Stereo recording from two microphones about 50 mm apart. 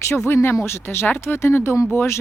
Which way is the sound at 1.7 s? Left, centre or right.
Left.